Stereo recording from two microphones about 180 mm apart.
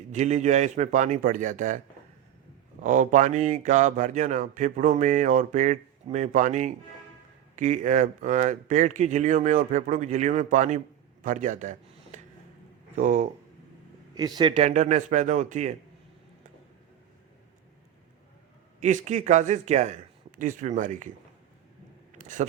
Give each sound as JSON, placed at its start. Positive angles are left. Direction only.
{"t": 0.1, "sound": "speech", "side_deg": -40}
{"t": 2.8, "sound": "speech", "side_deg": -45}
{"t": 11.2, "sound": "a sound", "side_deg": -45}
{"t": 13.0, "sound": "speech", "side_deg": -45}
{"t": 14.2, "sound": "speech", "side_deg": -25}
{"t": 14.6, "sound": "speech", "side_deg": -40}
{"t": 18.8, "sound": "speech", "side_deg": -40}
{"t": 22.1, "sound": "a sound", "side_deg": -45}